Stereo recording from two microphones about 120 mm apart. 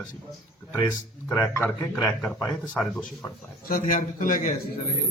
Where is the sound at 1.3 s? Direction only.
20° left (ahead or behind).